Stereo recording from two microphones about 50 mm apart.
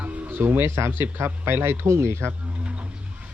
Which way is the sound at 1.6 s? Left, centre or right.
Right.